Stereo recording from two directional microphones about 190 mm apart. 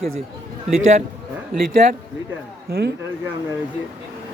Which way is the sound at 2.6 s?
55° right (ahead or behind).